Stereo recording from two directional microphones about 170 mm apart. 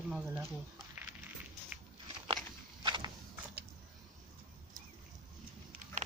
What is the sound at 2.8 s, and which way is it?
Walk, 25° right (ahead or behind).